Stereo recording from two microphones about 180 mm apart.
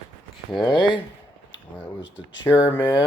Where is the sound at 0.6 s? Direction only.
25° left (ahead or behind).